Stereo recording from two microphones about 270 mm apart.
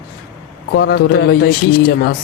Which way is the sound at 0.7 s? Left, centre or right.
Left.